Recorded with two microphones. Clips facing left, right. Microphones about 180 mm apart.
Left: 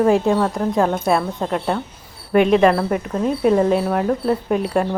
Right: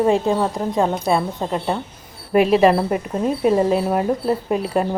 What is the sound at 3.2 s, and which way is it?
Speech, 5° right (ahead or behind).